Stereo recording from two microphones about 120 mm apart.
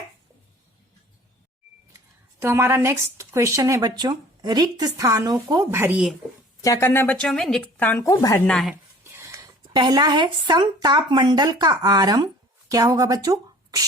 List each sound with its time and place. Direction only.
2.4 s speech: 20° right (ahead or behind)
6.6 s a woman's voice: 25° left (ahead or behind)
8.4 s speech: 5° left (ahead or behind)
8.7 s a sound: 25° right (ahead or behind)
9.6 s speech: 35° right (ahead or behind)